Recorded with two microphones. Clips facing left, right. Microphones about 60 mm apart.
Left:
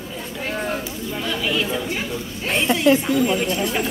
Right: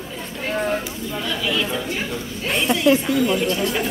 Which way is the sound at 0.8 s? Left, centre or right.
Left.